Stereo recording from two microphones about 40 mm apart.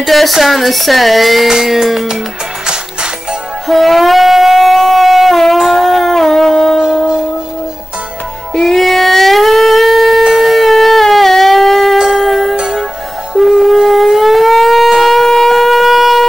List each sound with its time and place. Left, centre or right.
0.0 s speech: centre
2.6 s music: centre
3.6 s shofar: centre
8.5 s shofar: centre
12.0 s music: centre
12.3 s music: centre
12.5 s music: right
13.3 s music: centre
13.8 s siren: centre